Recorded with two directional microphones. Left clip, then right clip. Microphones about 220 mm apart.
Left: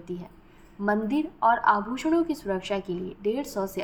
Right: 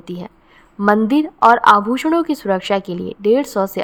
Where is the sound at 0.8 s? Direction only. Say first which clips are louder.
Right 12 dB; 50° right (ahead or behind).